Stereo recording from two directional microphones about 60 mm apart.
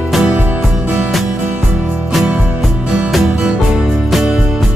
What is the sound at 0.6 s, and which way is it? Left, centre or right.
Music, centre.